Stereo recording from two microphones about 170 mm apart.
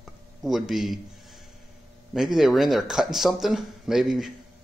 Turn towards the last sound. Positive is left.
turn(degrees=0)  # may be behind; listen again after turning